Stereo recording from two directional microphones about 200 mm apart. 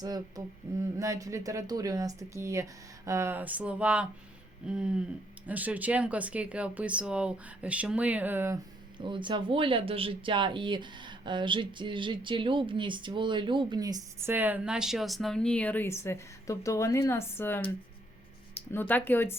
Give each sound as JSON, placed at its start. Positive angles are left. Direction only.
{"t": 0.0, "sound": "speech", "side_deg": -20}
{"t": 4.6, "sound": "a sound", "side_deg": -5}
{"t": 5.5, "sound": "speech", "side_deg": -10}
{"t": 9.0, "sound": "speech", "side_deg": -25}
{"t": 18.7, "sound": "speech", "side_deg": 10}